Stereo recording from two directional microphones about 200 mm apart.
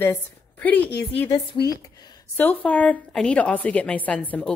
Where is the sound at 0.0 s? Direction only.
10° left (ahead or behind).